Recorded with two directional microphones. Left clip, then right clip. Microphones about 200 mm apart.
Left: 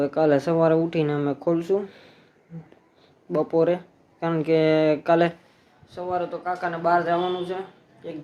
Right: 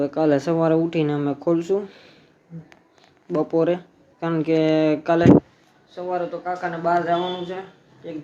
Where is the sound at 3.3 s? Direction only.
Centre (ahead or behind).